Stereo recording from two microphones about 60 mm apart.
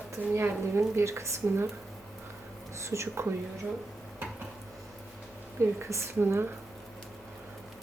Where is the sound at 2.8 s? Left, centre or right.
Right.